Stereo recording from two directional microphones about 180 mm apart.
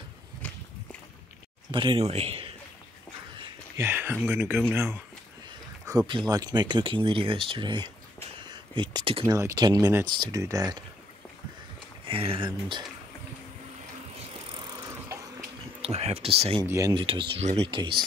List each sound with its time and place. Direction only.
1.7 s a man's voice: 25° right (ahead or behind)
3.3 s a sound: 25° right (ahead or behind)
3.8 s speech: 10° right (ahead or behind)
5.9 s speech: 25° right (ahead or behind)
9.2 s speech: 15° right (ahead or behind)
12.1 s speech: 30° right (ahead or behind)
14.5 s vehicle: 25° right (ahead or behind)
15.8 s a man's voice: 35° right (ahead or behind)
16.6 s speech: 15° right (ahead or behind)
17.0 s a man's voice: 30° right (ahead or behind)